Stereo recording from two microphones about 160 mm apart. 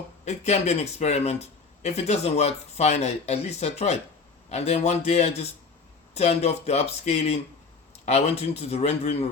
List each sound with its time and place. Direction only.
0.3 s speech: 45° left (ahead or behind)